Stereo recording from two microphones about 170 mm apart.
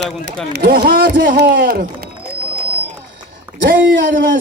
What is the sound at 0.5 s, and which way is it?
A man's voice, 70° right (ahead or behind).